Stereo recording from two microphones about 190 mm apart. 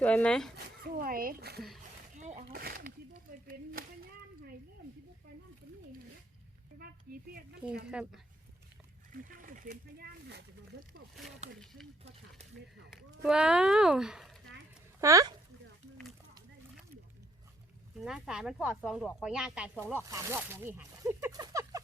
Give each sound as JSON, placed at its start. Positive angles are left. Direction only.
{"t": 0.0, "sound": "speech", "side_deg": 5}
{"t": 0.9, "sound": "speech", "side_deg": -50}
{"t": 2.1, "sound": "a sound", "side_deg": -40}
{"t": 2.5, "sound": "speech", "side_deg": -50}
{"t": 3.7, "sound": "a sound", "side_deg": -50}
{"t": 6.7, "sound": "speech", "side_deg": -50}
{"t": 7.9, "sound": "speech", "side_deg": -5}
{"t": 9.3, "sound": "speech", "side_deg": -45}
{"t": 11.6, "sound": "speech", "side_deg": 0}
{"t": 13.2, "sound": "speech", "side_deg": -5}
{"t": 15.0, "sound": "speech", "side_deg": -20}
{"t": 17.9, "sound": "speech", "side_deg": -5}